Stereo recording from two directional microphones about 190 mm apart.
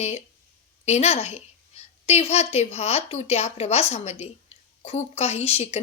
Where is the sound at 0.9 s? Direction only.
35° left (ahead or behind).